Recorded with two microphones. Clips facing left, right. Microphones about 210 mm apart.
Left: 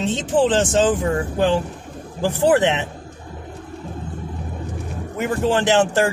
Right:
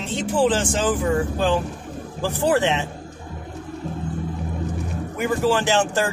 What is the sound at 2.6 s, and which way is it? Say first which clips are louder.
Speech: left 2 dB; 20° left (ahead or behind).